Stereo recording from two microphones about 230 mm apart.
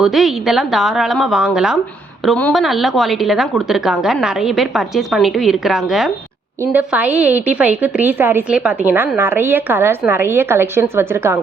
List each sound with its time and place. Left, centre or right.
0.0 s a woman's voice: centre